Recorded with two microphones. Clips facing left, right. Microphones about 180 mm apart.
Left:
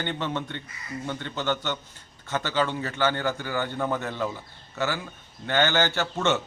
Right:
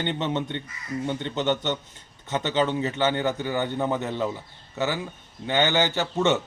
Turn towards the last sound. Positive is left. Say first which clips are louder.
# right 2 dB
turn(degrees=-15)  # may be behind; listen again after turning